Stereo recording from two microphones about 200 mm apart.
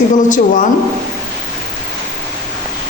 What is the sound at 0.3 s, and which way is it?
Speech, 40° left (ahead or behind).